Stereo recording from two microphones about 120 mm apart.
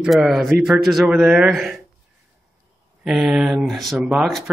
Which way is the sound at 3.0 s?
5° right (ahead or behind).